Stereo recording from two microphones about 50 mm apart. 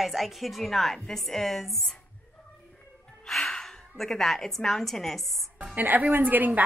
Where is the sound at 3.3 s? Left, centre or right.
Centre.